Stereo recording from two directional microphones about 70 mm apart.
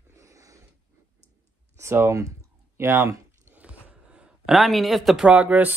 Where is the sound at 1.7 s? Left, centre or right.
Right.